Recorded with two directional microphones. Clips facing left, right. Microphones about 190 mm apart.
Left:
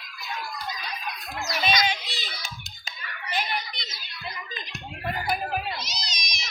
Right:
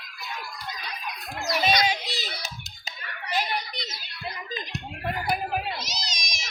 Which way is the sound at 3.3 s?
40° right (ahead or behind).